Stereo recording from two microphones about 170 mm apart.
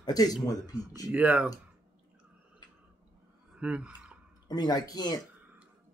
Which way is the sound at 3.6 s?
5° right (ahead or behind).